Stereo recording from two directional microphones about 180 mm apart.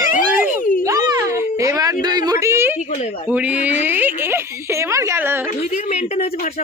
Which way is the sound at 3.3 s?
5° right (ahead or behind).